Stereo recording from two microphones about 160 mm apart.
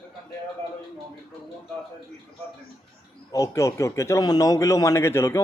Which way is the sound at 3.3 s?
20° left (ahead or behind).